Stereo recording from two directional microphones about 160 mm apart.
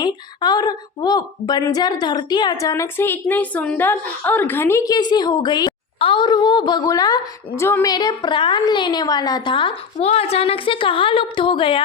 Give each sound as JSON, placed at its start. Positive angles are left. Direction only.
{"t": 0.0, "sound": "a woman's voice", "side_deg": 25}